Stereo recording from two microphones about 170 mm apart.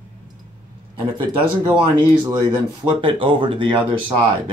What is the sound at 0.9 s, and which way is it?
Speech, 30° right (ahead or behind).